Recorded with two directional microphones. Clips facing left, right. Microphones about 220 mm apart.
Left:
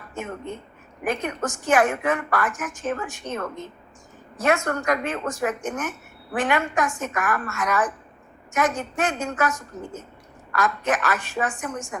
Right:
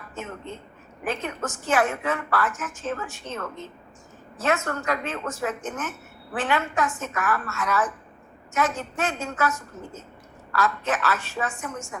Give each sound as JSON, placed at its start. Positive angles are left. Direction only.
{"t": 0.1, "sound": "a woman's voice", "side_deg": 15}